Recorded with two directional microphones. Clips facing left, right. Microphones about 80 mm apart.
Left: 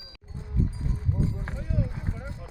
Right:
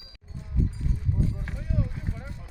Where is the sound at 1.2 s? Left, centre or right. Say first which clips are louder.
Left 1 dB; left.